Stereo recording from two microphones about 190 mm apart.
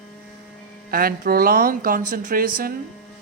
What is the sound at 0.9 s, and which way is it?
Speech, 50° right (ahead or behind).